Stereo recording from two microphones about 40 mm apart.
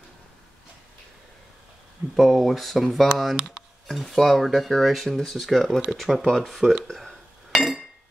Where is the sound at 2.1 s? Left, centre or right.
Centre.